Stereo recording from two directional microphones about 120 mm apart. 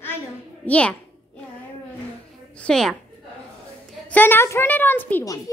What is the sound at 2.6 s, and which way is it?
Speech, 5° left (ahead or behind).